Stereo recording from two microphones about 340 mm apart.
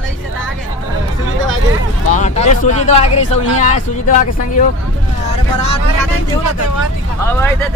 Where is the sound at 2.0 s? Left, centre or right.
Left.